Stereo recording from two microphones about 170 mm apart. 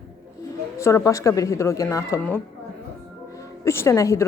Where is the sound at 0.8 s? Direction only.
15° left (ahead or behind).